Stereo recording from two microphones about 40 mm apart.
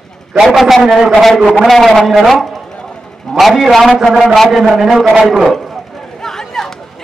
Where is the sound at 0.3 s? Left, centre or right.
Centre.